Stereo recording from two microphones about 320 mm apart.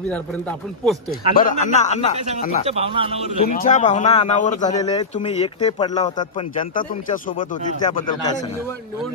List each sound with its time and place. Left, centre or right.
0.1 s speech: centre
1.3 s speech: left
2.6 s speech: centre
3.4 s speech: left